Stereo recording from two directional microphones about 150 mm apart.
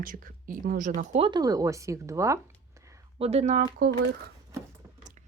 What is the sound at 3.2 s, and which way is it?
Speech, 45° right (ahead or behind).